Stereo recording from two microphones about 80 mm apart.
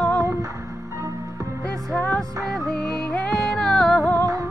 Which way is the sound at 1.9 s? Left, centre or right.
Centre.